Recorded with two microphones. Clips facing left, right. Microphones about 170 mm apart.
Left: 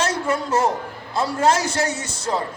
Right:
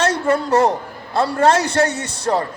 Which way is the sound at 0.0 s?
65° right (ahead or behind).